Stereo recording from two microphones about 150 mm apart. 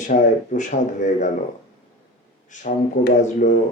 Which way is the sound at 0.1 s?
55° left (ahead or behind).